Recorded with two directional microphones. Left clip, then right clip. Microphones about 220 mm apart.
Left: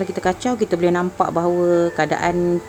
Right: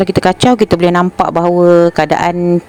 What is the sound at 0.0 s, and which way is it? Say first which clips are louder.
Speech: right 10 dB; 35° right (ahead or behind).